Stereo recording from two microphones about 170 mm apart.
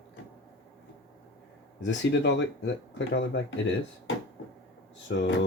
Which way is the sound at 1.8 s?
90° left.